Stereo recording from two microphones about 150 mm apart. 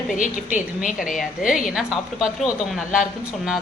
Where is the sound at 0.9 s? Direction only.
Centre (ahead or behind).